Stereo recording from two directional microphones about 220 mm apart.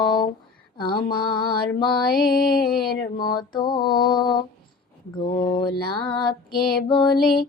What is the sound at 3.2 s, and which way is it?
Mantra, 20° left (ahead or behind).